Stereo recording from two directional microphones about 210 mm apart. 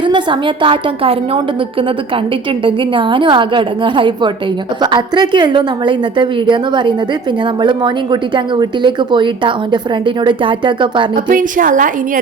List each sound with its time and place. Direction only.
0.0 s speech: 25° right (ahead or behind)
2.6 s speech: 25° right (ahead or behind)
11.3 s a woman's voice: 40° right (ahead or behind)